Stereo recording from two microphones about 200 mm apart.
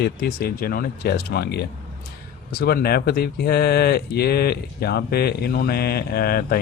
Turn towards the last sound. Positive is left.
turn(degrees=50)  # may be behind; listen again after turning